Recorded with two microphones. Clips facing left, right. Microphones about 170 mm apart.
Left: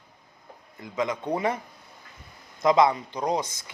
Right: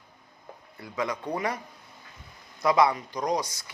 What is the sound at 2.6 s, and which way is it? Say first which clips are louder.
Speech: left 2 dB; 25° left (ahead or behind).